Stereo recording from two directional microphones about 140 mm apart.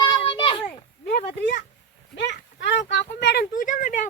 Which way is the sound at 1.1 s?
90° left.